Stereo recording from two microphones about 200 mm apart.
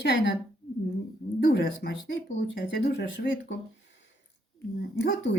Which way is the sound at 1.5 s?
65° left (ahead or behind).